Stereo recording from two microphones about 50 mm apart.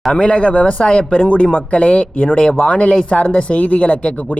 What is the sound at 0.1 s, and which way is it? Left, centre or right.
Speech, left.